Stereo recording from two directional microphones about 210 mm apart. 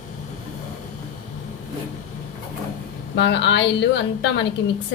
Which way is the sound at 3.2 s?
55° left (ahead or behind).